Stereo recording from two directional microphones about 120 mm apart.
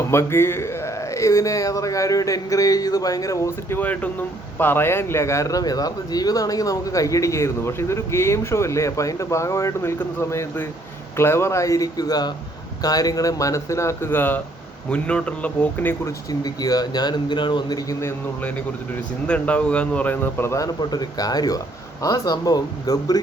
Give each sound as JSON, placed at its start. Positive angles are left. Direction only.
{"t": 0.0, "sound": "speech", "side_deg": 20}
{"t": 3.8, "sound": "a man's voice", "side_deg": 15}
{"t": 16.4, "sound": "speech", "side_deg": 30}
{"t": 19.3, "sound": "a man's voice", "side_deg": 10}
{"t": 20.9, "sound": "speech", "side_deg": 35}